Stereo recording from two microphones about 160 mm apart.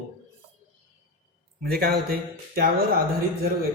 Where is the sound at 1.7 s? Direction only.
70° right (ahead or behind).